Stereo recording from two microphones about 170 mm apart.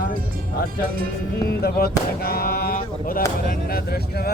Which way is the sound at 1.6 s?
65° left (ahead or behind).